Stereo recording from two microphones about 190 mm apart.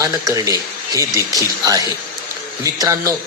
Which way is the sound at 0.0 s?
20° right (ahead or behind).